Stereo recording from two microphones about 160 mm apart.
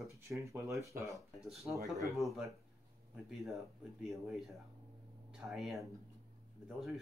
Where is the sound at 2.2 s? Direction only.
Centre (ahead or behind).